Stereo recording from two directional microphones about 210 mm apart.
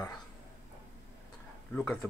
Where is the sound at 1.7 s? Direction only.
5° left (ahead or behind).